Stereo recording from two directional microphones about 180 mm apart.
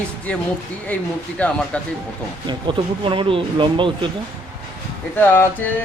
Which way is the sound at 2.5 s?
25° right (ahead or behind).